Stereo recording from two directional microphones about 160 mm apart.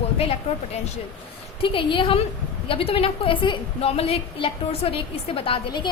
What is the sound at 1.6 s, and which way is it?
A woman's voice, 30° left (ahead or behind).